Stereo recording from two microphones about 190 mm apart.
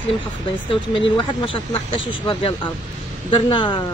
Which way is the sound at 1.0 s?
30° left (ahead or behind).